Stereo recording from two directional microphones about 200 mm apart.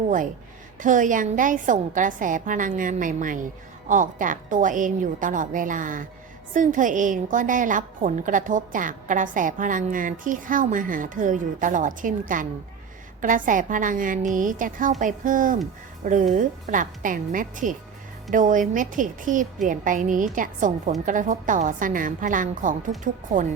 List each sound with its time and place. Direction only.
0.8 s a woman's voice: 40° right (ahead or behind)
13.2 s a woman's voice: 40° right (ahead or behind)